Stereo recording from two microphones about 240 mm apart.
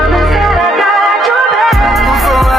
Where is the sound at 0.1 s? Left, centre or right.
Centre.